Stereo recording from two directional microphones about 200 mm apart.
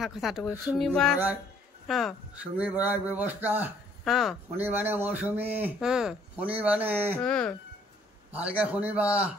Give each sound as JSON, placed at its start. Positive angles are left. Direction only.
{"t": 0.0, "sound": "a man's voice", "side_deg": 0}
{"t": 7.2, "sound": "speech", "side_deg": 5}
{"t": 8.3, "sound": "a man's voice", "side_deg": -5}